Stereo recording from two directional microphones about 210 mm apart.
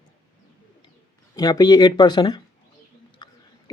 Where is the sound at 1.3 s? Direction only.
15° left (ahead or behind).